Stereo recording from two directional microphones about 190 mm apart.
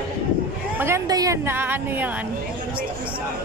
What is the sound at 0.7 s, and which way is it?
A woman's voice, 15° right (ahead or behind).